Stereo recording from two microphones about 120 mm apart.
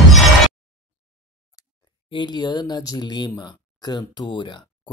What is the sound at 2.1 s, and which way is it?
Speech, 40° left (ahead or behind).